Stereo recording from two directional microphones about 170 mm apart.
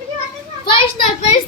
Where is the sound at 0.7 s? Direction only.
35° left (ahead or behind).